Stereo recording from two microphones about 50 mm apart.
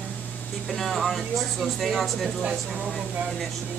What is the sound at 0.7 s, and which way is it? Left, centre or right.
Speech, centre.